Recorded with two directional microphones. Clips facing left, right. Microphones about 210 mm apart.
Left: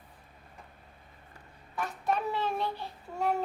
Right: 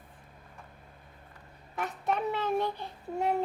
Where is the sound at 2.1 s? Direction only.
20° right (ahead or behind).